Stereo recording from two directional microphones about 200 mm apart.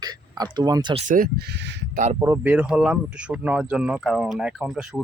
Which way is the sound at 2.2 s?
10° right (ahead or behind).